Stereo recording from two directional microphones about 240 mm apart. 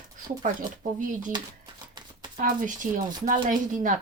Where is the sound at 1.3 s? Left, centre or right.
Centre.